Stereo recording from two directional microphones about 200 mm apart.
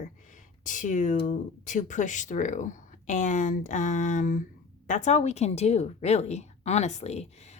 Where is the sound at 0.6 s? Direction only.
40° left (ahead or behind).